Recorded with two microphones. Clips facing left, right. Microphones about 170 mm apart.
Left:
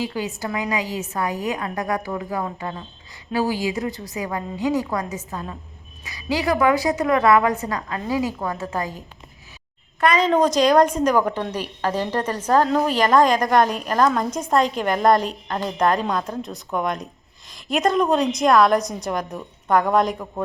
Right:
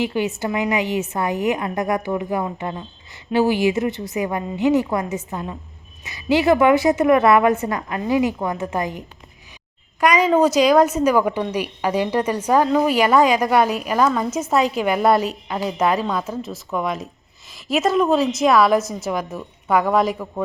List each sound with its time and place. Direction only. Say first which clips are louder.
0.0 s a woman's voice: right 5 dB; 25° right (ahead or behind); by 20.1 s 5° right (ahead or behind)